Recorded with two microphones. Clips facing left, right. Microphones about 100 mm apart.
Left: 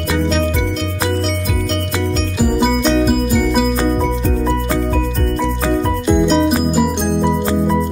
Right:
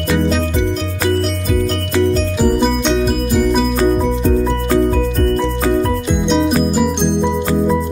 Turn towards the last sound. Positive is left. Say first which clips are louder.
# right 1 dB
turn(degrees=0)  # may be behind; listen again after turning